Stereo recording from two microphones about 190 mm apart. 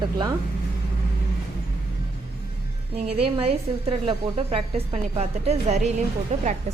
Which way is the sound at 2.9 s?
30° right (ahead or behind).